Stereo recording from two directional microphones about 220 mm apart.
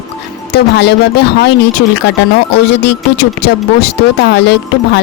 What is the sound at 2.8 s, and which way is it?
Speech, 50° left (ahead or behind).